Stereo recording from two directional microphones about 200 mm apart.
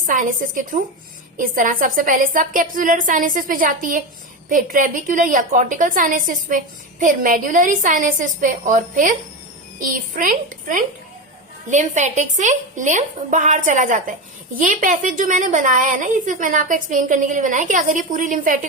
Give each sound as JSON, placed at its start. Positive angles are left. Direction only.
{"t": 0.0, "sound": "a woman's voice", "side_deg": -40}